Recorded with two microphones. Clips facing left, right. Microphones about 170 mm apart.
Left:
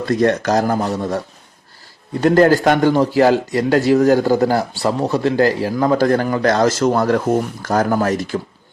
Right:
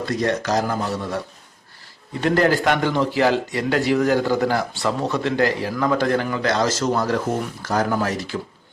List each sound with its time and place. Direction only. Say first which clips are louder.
0.0 s speech: left 6 dB; 55° left (ahead or behind)
2.2 s speech: left 6 dB; 40° left (ahead or behind)